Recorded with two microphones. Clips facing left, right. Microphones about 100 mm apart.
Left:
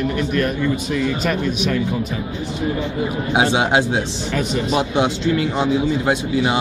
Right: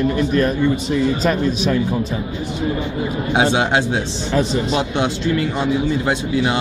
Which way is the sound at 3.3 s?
10° left (ahead or behind).